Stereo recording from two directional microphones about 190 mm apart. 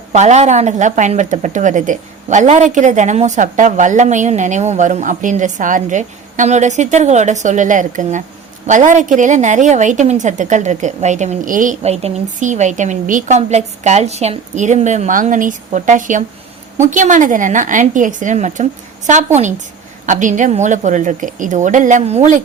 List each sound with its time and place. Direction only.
0.1 s a woman's voice: 35° right (ahead or behind)